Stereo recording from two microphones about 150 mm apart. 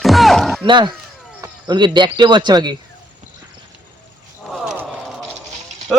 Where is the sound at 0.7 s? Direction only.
30° right (ahead or behind).